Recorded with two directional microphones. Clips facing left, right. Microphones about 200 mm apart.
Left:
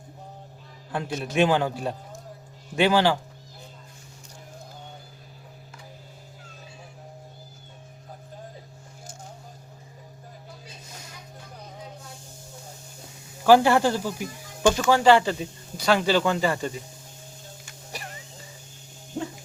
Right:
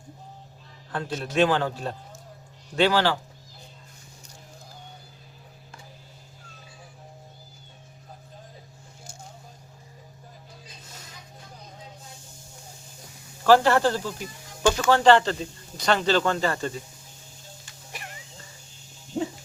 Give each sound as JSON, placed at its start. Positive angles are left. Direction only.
{"t": 0.9, "sound": "speech", "side_deg": 15}
{"t": 13.4, "sound": "speech", "side_deg": 10}